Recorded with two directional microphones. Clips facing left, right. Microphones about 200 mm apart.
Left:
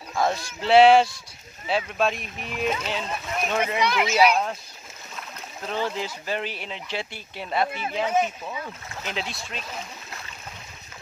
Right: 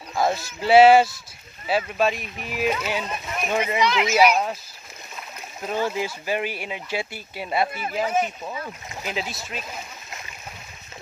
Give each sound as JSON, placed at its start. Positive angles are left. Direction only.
{"t": 0.1, "sound": "speech", "side_deg": -5}
{"t": 5.6, "sound": "speech", "side_deg": -10}